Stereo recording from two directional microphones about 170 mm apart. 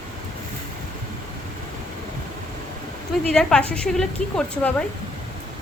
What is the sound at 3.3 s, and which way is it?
A woman's voice, 5° left (ahead or behind).